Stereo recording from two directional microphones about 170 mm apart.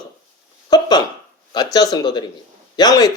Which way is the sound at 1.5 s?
25° left (ahead or behind).